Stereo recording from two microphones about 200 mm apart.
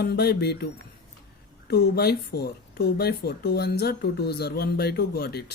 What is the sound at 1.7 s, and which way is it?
Speech, 50° left (ahead or behind).